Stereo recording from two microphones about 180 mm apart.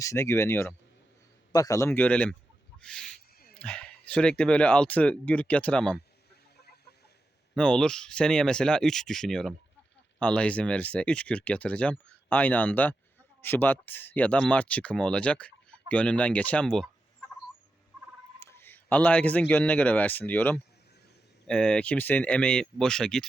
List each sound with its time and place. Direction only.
0.0 s speech: 15° left (ahead or behind)
2.7 s a sound: 5° left (ahead or behind)
3.5 s speech: 5° left (ahead or behind)
7.5 s speech: 5° left (ahead or behind)
18.3 s a man's voice: 10° left (ahead or behind)